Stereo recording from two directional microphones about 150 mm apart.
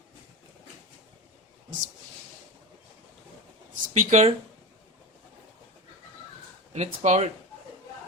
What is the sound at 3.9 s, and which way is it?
Speech, 50° right (ahead or behind).